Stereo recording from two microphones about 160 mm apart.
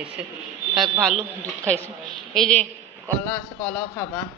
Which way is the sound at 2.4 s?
5° left (ahead or behind).